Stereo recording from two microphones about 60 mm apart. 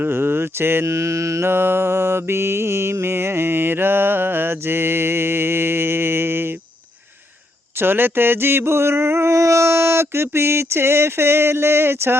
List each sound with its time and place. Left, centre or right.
0.0 s mantra: right
0.9 s mantra: right
1.5 s mantra: right
7.8 s mantra: right